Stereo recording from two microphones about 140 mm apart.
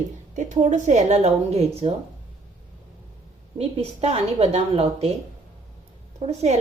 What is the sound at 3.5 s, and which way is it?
A woman's voice, 45° right (ahead or behind).